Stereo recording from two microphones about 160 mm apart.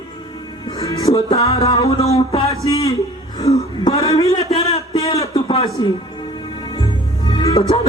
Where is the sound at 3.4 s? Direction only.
40° left (ahead or behind).